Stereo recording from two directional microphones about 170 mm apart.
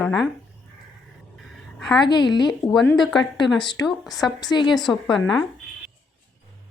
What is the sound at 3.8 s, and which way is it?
Speech, centre (ahead or behind).